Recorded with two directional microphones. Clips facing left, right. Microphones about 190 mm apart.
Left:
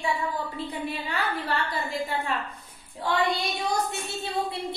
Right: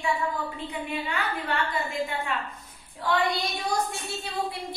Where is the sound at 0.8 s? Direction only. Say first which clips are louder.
Right 1 dB; 35° left (ahead or behind).